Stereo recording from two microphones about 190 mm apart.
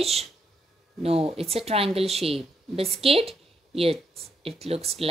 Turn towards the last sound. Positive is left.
turn(degrees=-30)  # may be behind; listen again after turning